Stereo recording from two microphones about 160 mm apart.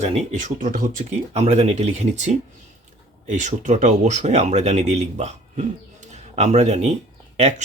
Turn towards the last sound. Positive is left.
turn(degrees=-40)  # may be behind; listen again after turning